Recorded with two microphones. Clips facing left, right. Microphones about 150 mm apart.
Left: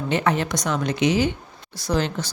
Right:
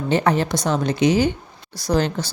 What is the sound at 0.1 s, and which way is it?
A woman's voice, 35° right (ahead or behind).